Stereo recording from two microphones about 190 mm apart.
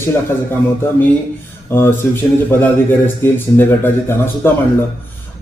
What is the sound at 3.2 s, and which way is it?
A man's voice, 10° left (ahead or behind).